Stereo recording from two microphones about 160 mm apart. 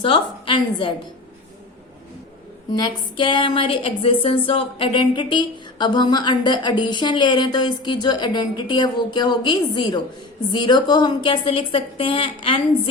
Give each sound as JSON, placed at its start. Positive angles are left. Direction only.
{"t": 0.0, "sound": "a woman's voice", "side_deg": 30}
{"t": 2.7, "sound": "a woman's voice", "side_deg": 30}